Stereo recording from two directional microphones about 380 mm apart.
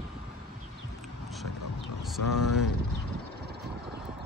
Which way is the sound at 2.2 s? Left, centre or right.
Left.